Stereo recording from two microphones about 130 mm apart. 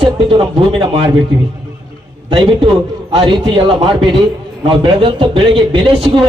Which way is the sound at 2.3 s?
40° right (ahead or behind).